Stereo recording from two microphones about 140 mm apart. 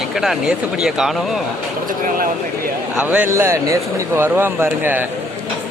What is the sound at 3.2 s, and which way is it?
Speech, 20° right (ahead or behind).